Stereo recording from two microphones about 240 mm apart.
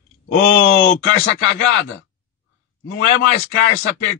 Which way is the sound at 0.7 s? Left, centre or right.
Left.